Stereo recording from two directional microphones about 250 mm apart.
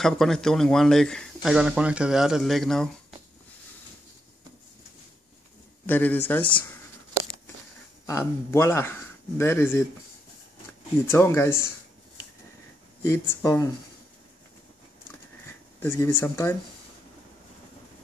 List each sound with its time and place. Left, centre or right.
0.0 s speech: centre
5.9 s speech: centre
8.1 s speech: centre
11.1 s speech: centre
13.0 s speech: centre
15.8 s speech: centre